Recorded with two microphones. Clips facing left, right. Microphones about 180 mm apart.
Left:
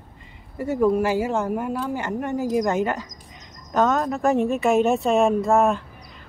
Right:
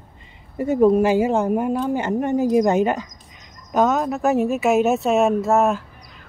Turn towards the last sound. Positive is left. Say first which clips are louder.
# right 1 dB
turn(degrees=-5)  # may be behind; listen again after turning